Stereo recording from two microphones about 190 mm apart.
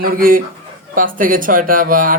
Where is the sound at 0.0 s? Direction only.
45° right (ahead or behind).